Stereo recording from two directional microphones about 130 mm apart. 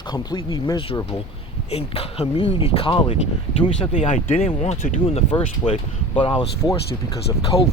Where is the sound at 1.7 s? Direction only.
50° left (ahead or behind).